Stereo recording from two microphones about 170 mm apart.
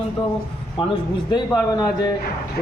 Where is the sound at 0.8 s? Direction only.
30° left (ahead or behind).